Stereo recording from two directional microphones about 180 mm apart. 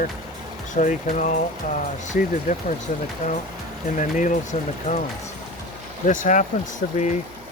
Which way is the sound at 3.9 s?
45° left (ahead or behind).